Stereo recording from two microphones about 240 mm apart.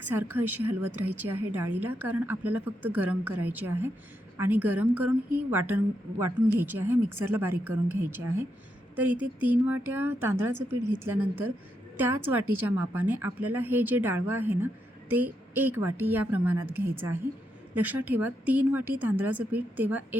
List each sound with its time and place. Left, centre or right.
0.1 s a woman's voice: centre
10.5 s speech: right
11.9 s a woman's voice: centre